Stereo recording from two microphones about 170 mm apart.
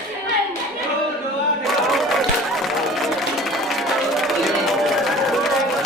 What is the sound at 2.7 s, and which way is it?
Music, centre (ahead or behind).